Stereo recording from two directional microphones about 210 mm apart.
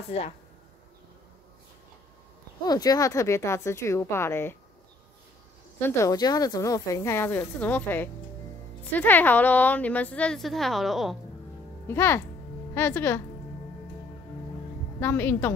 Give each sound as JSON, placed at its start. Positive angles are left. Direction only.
{"t": 0.1, "sound": "speech", "side_deg": 30}
{"t": 2.6, "sound": "a woman's voice", "side_deg": 20}
{"t": 5.8, "sound": "a woman's voice", "side_deg": 10}
{"t": 11.9, "sound": "a woman's voice", "side_deg": 10}
{"t": 15.0, "sound": "a woman's voice", "side_deg": 10}